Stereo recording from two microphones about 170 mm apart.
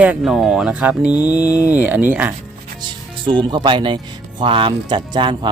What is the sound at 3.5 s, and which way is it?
Speech, 25° right (ahead or behind).